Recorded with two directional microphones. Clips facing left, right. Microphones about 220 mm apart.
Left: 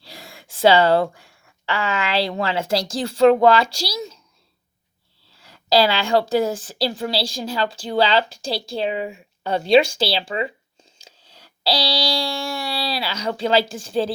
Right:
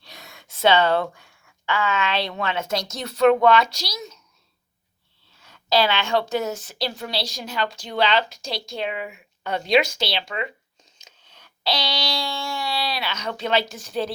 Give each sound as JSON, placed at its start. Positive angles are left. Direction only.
{"t": 0.0, "sound": "speech", "side_deg": 30}
{"t": 5.3, "sound": "a woman's voice", "side_deg": 35}
{"t": 11.0, "sound": "a sound", "side_deg": 35}